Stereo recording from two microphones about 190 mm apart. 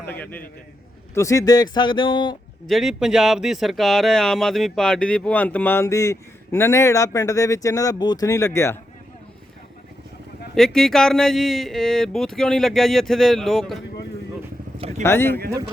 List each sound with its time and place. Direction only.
0.0 s speech: 10° left (ahead or behind)
2.6 s speech: centre (ahead or behind)
10.5 s speech: centre (ahead or behind)
14.8 s vehicle: 35° right (ahead or behind)
15.0 s speech: 10° left (ahead or behind)